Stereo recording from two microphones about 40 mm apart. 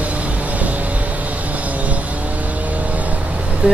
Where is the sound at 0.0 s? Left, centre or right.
Right.